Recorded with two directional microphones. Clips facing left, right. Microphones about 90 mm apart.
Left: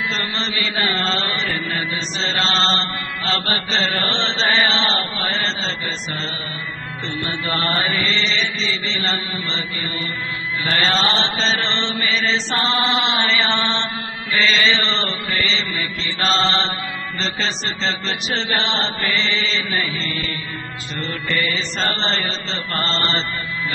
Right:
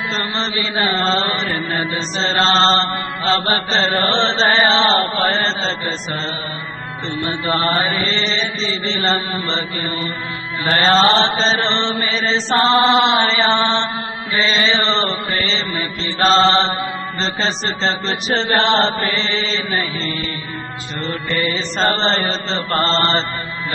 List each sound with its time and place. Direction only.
0.1 s chant: 30° right (ahead or behind)
7.2 s chant: 30° right (ahead or behind)
10.7 s chant: 40° right (ahead or behind)
21.3 s chant: 30° right (ahead or behind)